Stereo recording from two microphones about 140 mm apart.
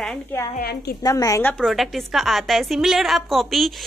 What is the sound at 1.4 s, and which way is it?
Speech, 10° left (ahead or behind).